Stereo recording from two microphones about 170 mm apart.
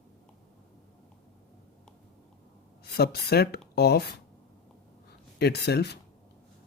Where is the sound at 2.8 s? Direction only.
70° left (ahead or behind).